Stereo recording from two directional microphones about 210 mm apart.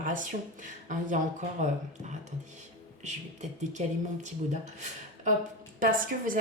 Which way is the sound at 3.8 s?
35° right (ahead or behind).